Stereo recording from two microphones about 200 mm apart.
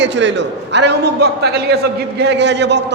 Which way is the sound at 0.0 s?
60° right (ahead or behind).